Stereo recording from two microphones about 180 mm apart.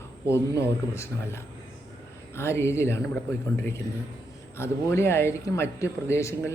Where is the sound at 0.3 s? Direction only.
15° left (ahead or behind).